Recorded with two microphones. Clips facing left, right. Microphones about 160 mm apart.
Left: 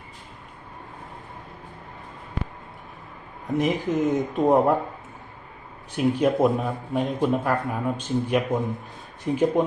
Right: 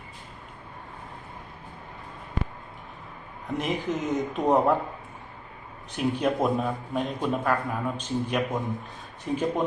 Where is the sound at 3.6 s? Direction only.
55° left (ahead or behind).